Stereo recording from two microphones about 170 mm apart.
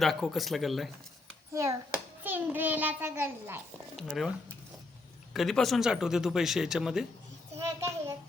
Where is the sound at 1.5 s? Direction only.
15° right (ahead or behind).